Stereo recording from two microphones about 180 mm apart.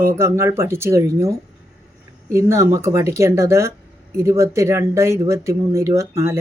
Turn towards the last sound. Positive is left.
turn(degrees=-15)  # may be behind; listen again after turning